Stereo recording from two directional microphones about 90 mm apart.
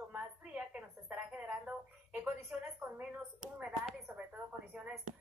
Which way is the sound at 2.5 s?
10° right (ahead or behind).